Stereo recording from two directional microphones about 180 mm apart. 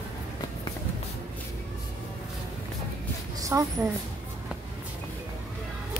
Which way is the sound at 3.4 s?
20° right (ahead or behind).